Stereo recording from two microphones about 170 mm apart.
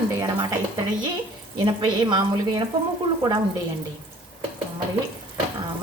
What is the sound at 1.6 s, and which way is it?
Speech, 25° right (ahead or behind).